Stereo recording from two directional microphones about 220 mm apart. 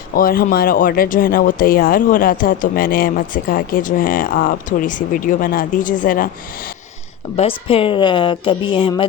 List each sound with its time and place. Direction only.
0.2 s speech: 40° left (ahead or behind)
7.3 s a woman's voice: 25° left (ahead or behind)